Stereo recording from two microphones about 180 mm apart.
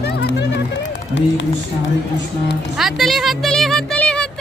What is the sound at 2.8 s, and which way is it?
Speech, centre (ahead or behind).